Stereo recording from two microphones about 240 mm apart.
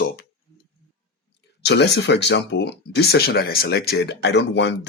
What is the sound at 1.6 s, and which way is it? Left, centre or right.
Speech, left.